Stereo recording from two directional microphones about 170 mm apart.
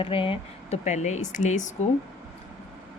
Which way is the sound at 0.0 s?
30° left (ahead or behind).